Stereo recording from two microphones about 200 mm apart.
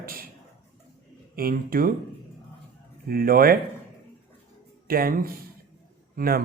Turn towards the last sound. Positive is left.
turn(degrees=-50)  # may be behind; listen again after turning